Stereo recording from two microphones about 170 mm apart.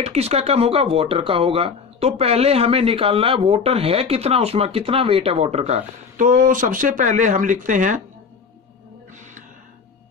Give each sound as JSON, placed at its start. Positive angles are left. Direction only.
{"t": 0.0, "sound": "speech", "side_deg": -40}